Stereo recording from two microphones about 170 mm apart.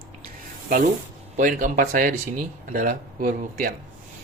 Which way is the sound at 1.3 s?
50° right (ahead or behind).